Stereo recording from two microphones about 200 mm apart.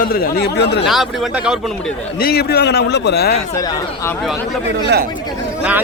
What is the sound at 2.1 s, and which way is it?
A man's voice, 50° left (ahead or behind).